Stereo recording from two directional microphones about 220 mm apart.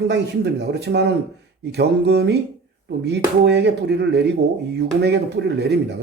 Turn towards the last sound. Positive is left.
turn(degrees=-50)  # may be behind; listen again after turning